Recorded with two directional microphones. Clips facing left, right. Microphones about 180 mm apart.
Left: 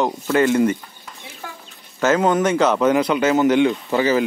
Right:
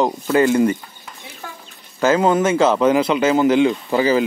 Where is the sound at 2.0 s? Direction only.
30° right (ahead or behind).